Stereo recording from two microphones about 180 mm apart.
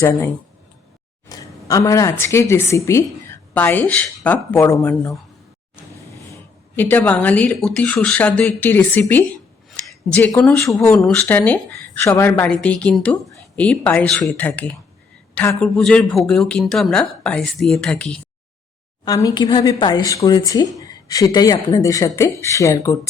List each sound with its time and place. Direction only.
0.0 s a woman's voice: 15° left (ahead or behind)
1.3 s a sound: 20° left (ahead or behind)
2.2 s a woman's voice: 15° left (ahead or behind)
6.7 s a woman's voice: 10° left (ahead or behind)
19.0 s speech: 20° left (ahead or behind)